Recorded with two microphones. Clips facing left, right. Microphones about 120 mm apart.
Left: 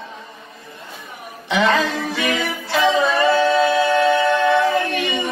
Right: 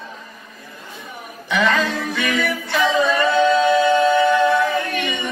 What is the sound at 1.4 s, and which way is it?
Music, 30° left (ahead or behind).